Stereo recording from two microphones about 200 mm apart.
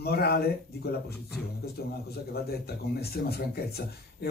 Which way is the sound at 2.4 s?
50° left (ahead or behind).